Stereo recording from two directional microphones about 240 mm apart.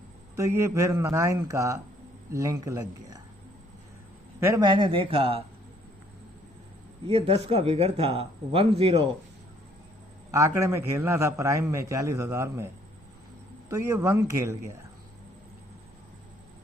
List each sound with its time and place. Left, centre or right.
0.3 s a man's voice: centre
4.4 s speech: centre
7.1 s speech: right
10.3 s a man's voice: centre